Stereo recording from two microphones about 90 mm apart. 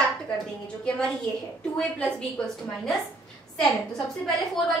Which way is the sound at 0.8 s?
10° left (ahead or behind).